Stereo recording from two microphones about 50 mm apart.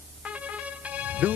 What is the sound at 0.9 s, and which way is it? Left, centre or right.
Music, right.